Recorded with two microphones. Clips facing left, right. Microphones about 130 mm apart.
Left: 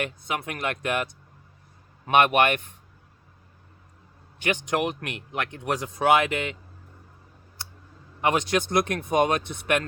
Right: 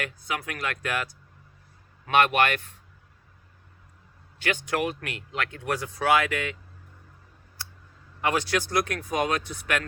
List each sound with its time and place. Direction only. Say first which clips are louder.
0.0 s speech: left 3 dB; 25° left (ahead or behind)
4.4 s speech: left 2 dB; 20° left (ahead or behind)
8.2 s speech: left 2 dB; 20° left (ahead or behind)